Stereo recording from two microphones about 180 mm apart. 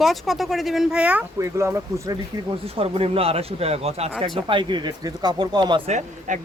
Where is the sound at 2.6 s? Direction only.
30° right (ahead or behind).